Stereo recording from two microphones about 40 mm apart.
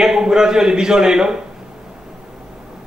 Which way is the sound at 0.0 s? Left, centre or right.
Centre.